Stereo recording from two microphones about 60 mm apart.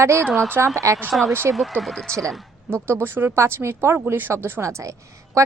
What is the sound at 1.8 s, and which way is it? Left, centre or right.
Speech, centre.